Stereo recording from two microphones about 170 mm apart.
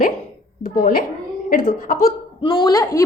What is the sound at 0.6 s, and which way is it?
A child's voice, 55° left (ahead or behind).